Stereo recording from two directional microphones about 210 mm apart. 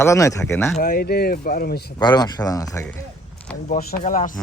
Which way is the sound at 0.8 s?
45° left (ahead or behind).